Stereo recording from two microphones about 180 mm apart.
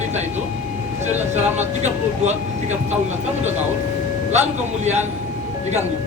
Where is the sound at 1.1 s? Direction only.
10° right (ahead or behind).